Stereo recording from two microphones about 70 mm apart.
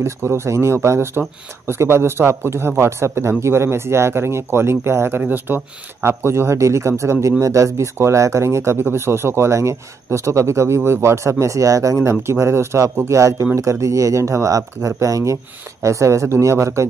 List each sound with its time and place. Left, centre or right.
0.0 s a man's voice: right